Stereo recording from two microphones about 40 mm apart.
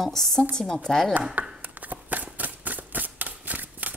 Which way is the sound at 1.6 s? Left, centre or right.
Right.